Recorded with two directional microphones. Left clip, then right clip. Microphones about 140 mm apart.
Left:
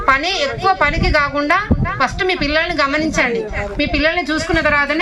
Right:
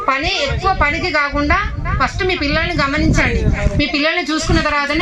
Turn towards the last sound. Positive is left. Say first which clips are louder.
# left 1 dB
turn(degrees=0)  # may be behind; listen again after turning